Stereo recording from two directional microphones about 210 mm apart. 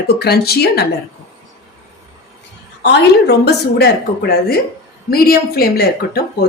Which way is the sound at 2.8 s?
55° left (ahead or behind).